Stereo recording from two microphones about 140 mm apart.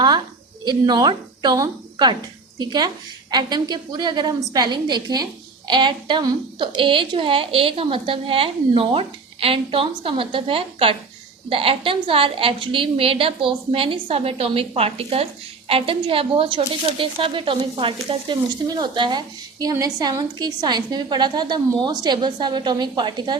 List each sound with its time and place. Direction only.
0.6 s a woman's voice: 30° right (ahead or behind)